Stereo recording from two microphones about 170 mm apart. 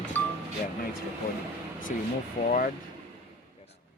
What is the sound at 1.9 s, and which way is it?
Speech, 55° left (ahead or behind).